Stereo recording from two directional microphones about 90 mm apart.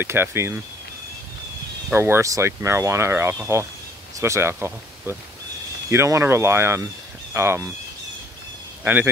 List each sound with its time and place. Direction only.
0.0 s speech: 30° right (ahead or behind)
2.0 s speech: 30° right (ahead or behind)
8.8 s speech: 20° right (ahead or behind)